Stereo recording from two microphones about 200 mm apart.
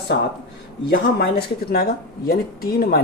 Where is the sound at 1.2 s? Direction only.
55° left (ahead or behind).